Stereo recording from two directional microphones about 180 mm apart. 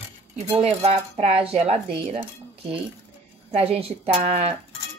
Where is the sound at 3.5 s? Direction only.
35° right (ahead or behind).